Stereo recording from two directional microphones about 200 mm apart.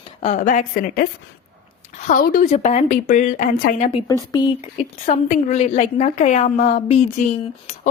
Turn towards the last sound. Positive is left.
turn(degrees=35)  # may be behind; listen again after turning